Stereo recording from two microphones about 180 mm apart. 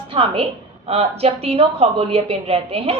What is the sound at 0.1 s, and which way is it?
A woman's voice, 30° right (ahead or behind).